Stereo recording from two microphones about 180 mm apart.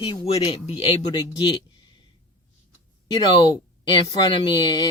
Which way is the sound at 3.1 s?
25° left (ahead or behind).